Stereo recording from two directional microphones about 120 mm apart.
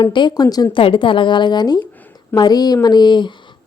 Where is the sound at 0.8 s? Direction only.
45° left (ahead or behind).